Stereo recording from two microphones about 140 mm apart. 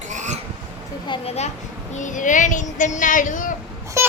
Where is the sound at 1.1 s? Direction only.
35° left (ahead or behind).